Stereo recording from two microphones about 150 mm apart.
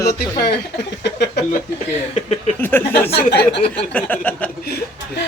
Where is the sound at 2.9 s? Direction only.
90° left.